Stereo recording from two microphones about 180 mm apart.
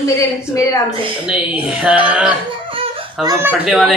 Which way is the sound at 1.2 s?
5° right (ahead or behind).